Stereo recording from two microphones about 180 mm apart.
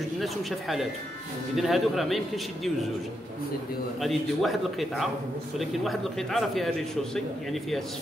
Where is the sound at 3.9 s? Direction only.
Centre (ahead or behind).